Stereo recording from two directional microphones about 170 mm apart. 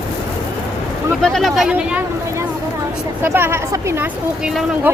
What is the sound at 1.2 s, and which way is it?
Speech, centre (ahead or behind).